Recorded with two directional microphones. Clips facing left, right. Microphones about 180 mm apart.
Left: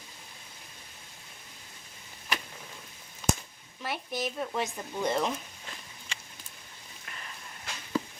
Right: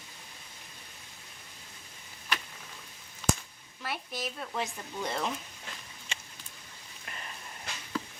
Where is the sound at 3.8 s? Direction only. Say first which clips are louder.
Left 4 dB; 15° left (ahead or behind).